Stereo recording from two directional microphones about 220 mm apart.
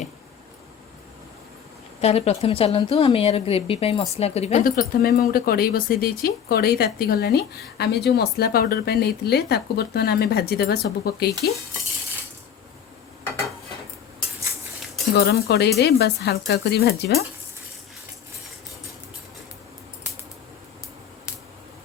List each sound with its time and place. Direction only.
2.0 s a woman's voice: 30° left (ahead or behind); by 11.5 s 45° left (ahead or behind)
15.1 s speech: 45° left (ahead or behind)